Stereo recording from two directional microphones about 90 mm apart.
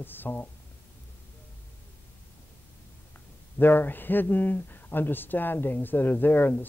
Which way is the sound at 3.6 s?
20° left (ahead or behind).